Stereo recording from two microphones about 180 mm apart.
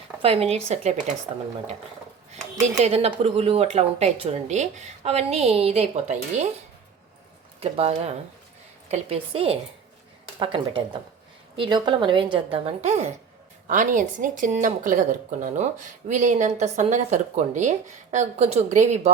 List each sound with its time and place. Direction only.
0.2 s speech: 35° right (ahead or behind)
2.8 s speech: 35° right (ahead or behind)
7.6 s a woman's voice: 35° right (ahead or behind)